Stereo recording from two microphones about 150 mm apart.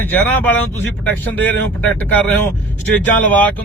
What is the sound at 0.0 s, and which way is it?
Speech, 10° left (ahead or behind).